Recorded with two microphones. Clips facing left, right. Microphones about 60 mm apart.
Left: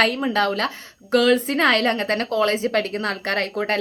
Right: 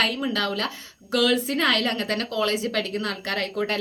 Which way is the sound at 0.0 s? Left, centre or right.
Left.